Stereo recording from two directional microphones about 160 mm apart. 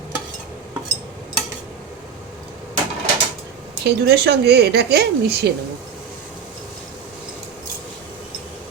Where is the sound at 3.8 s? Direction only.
90° right.